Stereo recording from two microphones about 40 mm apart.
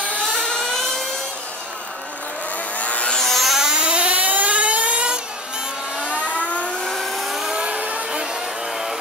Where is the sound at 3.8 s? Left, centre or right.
Right.